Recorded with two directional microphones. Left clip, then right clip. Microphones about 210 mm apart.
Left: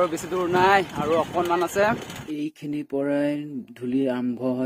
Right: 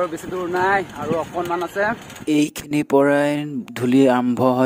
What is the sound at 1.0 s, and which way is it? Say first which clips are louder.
Speech: left 1 dB; centre (ahead or behind).